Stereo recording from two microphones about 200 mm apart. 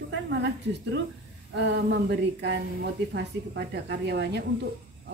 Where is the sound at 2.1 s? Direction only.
55° right (ahead or behind).